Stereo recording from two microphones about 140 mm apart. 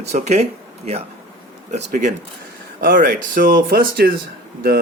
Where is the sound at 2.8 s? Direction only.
85° right.